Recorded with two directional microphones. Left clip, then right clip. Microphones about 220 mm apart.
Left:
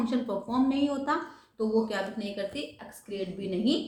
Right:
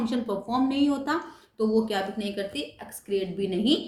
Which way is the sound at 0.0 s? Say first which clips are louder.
Right 1 dB; 45° right (ahead or behind).